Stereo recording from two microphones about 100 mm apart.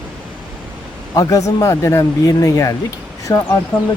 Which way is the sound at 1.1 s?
35° left (ahead or behind).